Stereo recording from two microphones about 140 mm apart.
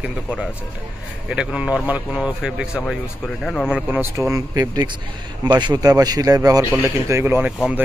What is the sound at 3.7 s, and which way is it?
Speech, 10° right (ahead or behind).